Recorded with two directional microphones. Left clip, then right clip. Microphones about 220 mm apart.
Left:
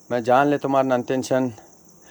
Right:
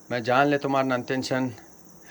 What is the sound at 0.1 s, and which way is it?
A man's voice, 25° left (ahead or behind).